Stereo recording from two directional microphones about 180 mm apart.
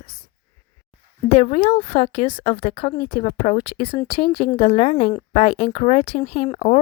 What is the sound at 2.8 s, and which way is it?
Speech, 45° left (ahead or behind).